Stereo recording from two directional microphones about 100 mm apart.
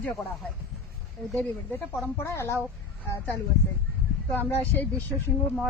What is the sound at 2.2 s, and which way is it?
Speech, 25° left (ahead or behind).